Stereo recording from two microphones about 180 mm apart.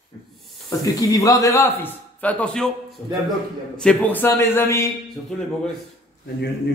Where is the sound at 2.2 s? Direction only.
5° left (ahead or behind).